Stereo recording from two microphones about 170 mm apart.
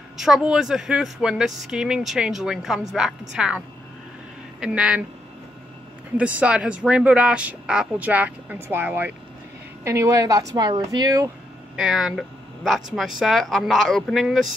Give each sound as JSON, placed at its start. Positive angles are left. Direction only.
{"t": 0.2, "sound": "speech", "side_deg": -5}
{"t": 6.1, "sound": "a woman's voice", "side_deg": -5}
{"t": 11.7, "sound": "speech", "side_deg": -5}